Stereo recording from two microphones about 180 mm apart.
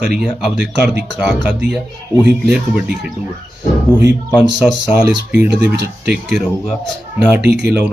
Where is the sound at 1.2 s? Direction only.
5° right (ahead or behind).